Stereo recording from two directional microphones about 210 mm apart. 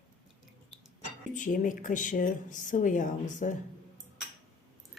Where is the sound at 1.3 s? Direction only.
35° left (ahead or behind).